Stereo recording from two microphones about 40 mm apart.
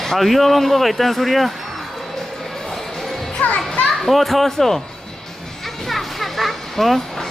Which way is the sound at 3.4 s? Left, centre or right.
Left.